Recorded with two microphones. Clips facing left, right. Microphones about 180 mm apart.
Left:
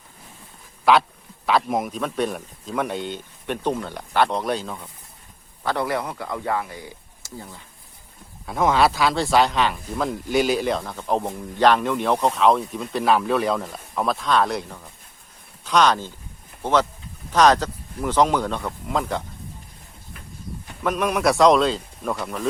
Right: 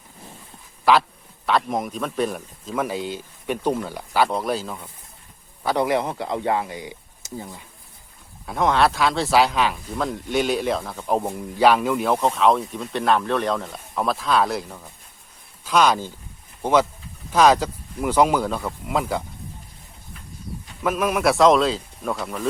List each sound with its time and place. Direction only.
0.9 s speech: centre (ahead or behind)
5.6 s speech: 20° right (ahead or behind)
8.4 s speech: centre (ahead or behind)
20.8 s speech: 5° right (ahead or behind)